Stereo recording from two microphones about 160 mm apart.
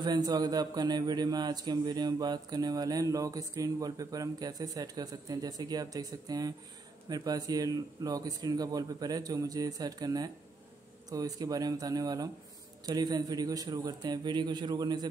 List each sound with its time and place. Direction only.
0.0 s a man's voice: 25° right (ahead or behind)